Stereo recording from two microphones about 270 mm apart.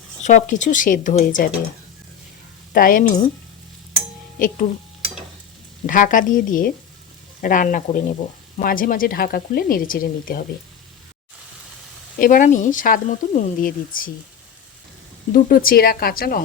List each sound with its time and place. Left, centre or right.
0.2 s speech: left
2.7 s speech: left
4.4 s speech: left
5.8 s speech: left
12.2 s speech: left
15.3 s speech: left